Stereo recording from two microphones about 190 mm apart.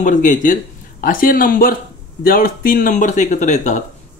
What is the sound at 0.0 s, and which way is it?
Speech, 40° left (ahead or behind).